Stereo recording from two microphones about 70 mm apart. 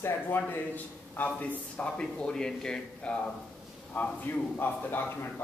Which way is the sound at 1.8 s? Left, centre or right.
Centre.